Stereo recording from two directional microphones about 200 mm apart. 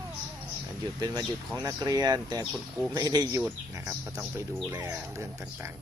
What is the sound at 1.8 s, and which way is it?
Speech, 20° right (ahead or behind).